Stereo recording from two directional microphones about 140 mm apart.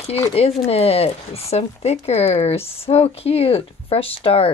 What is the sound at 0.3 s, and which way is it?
A child's voice, 45° left (ahead or behind).